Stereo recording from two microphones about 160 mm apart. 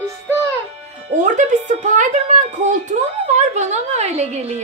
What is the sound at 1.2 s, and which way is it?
A woman's voice, 50° right (ahead or behind).